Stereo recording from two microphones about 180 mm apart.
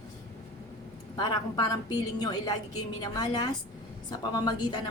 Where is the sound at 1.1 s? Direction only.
25° left (ahead or behind).